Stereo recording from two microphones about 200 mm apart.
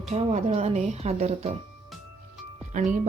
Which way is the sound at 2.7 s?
35° right (ahead or behind).